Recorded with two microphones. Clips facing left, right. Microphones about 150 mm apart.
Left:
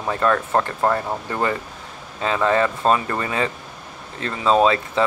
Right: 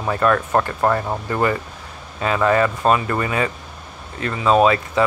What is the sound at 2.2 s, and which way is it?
Speech, 25° left (ahead or behind).